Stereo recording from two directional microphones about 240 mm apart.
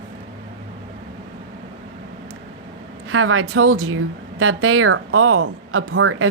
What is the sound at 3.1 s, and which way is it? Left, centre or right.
Speech, right.